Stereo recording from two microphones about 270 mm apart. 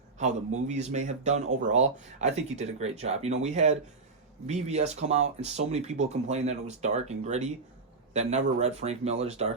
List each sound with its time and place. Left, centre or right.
0.2 s a man's voice: right